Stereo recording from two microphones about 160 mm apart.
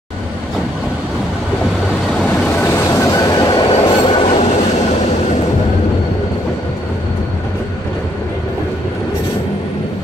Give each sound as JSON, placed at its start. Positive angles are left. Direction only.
{"t": 2.1, "sound": "vehicle", "side_deg": 5}
{"t": 2.7, "sound": "train", "side_deg": 20}